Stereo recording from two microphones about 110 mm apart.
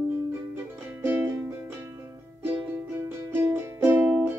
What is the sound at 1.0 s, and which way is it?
Music, 15° right (ahead or behind).